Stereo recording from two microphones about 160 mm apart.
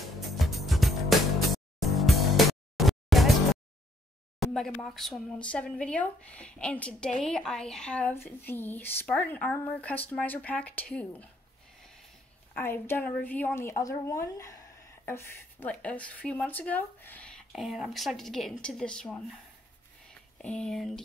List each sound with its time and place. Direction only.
0.0 s music: centre (ahead or behind)
4.4 s speech: centre (ahead or behind)
12.5 s speech: 15° left (ahead or behind)
20.4 s speech: 5° left (ahead or behind)